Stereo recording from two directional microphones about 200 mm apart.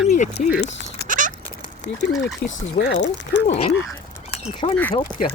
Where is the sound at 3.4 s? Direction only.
30° left (ahead or behind).